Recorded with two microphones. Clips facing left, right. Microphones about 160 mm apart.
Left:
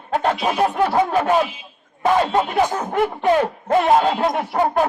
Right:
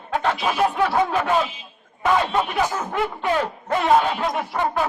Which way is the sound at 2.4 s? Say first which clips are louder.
Left 4 dB; 40° left (ahead or behind).